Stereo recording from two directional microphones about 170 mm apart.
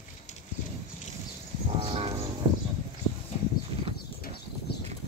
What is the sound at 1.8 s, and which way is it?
Horse, 35° right (ahead or behind).